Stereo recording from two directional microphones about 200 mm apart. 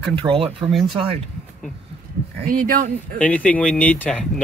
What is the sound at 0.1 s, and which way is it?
Speech, 25° right (ahead or behind).